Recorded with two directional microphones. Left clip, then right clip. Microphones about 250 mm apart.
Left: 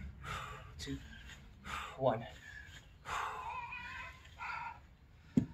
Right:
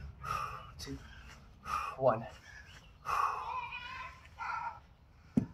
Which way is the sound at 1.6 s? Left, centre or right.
Centre.